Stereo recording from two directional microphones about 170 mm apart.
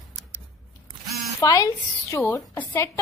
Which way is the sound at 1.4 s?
20° left (ahead or behind).